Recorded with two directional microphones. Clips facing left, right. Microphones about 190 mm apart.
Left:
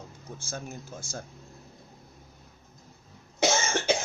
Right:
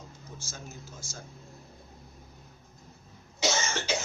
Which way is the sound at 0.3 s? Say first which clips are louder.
Left 7 dB; 55° left (ahead or behind).